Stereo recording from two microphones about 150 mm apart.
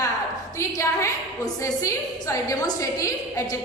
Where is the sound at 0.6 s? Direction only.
20° left (ahead or behind).